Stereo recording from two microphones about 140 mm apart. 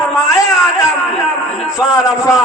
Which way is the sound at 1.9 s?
25° left (ahead or behind).